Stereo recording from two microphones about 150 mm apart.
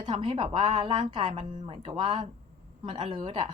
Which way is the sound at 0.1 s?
35° right (ahead or behind).